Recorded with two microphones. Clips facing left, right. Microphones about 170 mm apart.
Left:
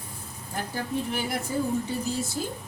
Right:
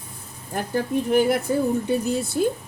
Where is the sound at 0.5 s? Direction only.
55° right (ahead or behind).